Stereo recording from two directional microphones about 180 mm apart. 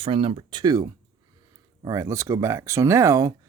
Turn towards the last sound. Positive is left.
turn(degrees=-15)  # may be behind; listen again after turning